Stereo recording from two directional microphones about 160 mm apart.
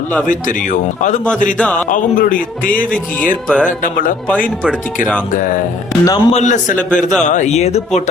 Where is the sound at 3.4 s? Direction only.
5° right (ahead or behind).